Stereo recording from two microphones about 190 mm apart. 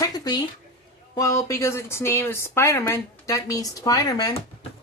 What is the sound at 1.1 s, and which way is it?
Speech, 15° left (ahead or behind).